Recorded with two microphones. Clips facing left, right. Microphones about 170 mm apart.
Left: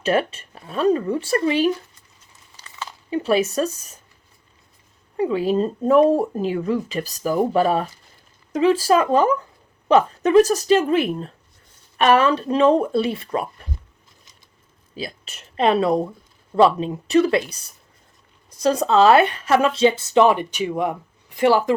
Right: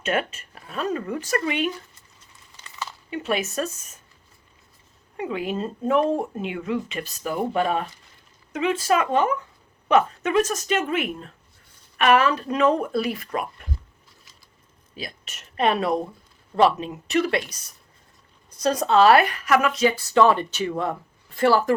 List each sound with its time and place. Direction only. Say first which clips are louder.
0.0 s speech: left 5 dB; 30° left (ahead or behind)
3.1 s speech: left 7 dB; 30° left (ahead or behind)
5.1 s speech: left 8 dB; 30° left (ahead or behind)
14.9 s speech: left 5 dB; 30° left (ahead or behind)